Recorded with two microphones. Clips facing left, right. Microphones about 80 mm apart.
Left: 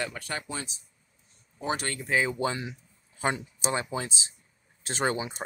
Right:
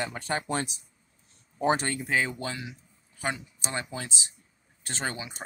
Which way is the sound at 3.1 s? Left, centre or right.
Left.